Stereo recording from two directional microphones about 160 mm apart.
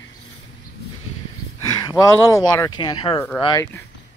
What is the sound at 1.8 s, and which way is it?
Speech, 20° left (ahead or behind).